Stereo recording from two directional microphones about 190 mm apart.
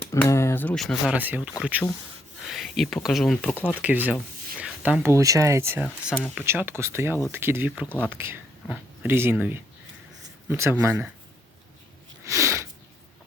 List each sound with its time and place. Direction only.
0.1 s speech: 15° left (ahead or behind); by 1.4 s 10° right (ahead or behind)
2.4 s speech: centre (ahead or behind)
5.8 s speech: centre (ahead or behind)
12.2 s sniff: 15° right (ahead or behind)